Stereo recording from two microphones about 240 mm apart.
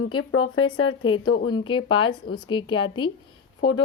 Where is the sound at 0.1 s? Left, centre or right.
Left.